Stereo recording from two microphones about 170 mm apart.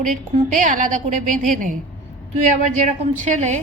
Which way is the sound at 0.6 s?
50° right (ahead or behind).